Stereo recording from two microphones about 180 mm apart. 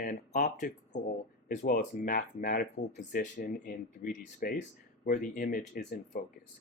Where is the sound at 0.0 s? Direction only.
50° left (ahead or behind).